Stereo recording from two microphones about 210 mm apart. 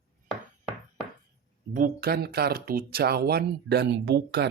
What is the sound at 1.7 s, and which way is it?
Speech, 45° right (ahead or behind).